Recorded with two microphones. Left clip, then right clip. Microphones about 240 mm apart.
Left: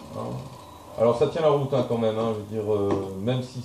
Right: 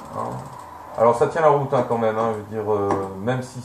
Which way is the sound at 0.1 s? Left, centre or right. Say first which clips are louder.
Right 6 dB; right.